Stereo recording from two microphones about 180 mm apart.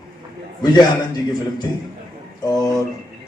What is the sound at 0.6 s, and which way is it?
A man's voice, 25° left (ahead or behind).